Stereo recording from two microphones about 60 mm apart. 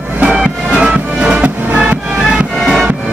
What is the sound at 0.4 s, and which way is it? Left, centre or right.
Music, centre.